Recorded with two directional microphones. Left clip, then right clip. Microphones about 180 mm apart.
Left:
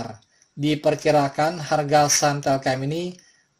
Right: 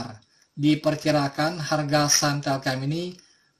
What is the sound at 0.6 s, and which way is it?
Speech, 25° left (ahead or behind).